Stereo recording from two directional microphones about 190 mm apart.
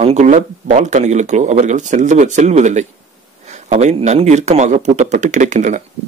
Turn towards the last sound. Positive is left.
turn(degrees=-40)  # may be behind; listen again after turning